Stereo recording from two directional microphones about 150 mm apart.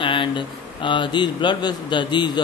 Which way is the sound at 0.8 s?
30° left (ahead or behind).